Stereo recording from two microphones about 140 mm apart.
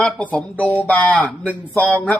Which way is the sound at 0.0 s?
10° left (ahead or behind).